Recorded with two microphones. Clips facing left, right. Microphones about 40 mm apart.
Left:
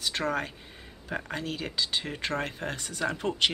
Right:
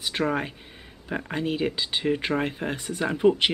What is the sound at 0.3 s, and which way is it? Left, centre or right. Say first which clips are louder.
Speech: right 3 dB; centre.